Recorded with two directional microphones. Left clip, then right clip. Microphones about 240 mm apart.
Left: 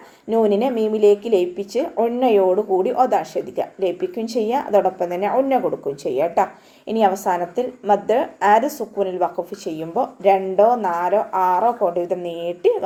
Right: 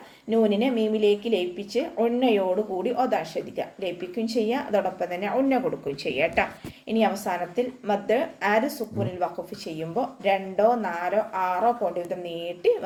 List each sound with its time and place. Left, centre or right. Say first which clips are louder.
0.3 s a woman's voice: left 5 dB; centre